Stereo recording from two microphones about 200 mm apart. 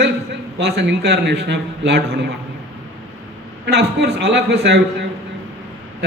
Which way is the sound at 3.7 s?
55° right (ahead or behind).